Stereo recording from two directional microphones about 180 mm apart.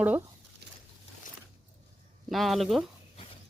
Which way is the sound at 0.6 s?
65° right (ahead or behind).